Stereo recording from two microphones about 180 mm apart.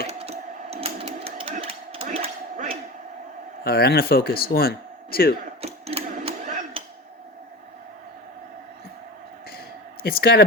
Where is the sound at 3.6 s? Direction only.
60° left (ahead or behind).